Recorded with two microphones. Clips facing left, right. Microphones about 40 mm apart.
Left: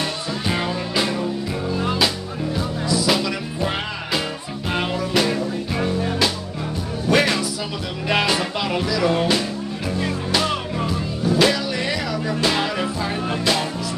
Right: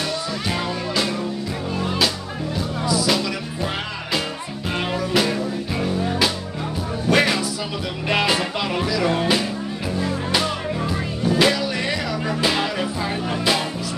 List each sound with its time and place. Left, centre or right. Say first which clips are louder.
0.5 s music: left 2 dB; centre
2.9 s music: left 1 dB; centre
7.1 s music: even; centre
11.2 s music: even; centre